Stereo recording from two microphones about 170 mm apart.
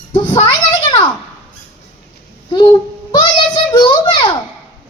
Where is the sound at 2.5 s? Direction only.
25° left (ahead or behind).